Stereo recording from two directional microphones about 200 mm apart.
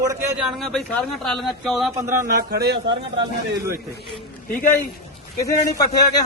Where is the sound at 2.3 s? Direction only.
50° right (ahead or behind).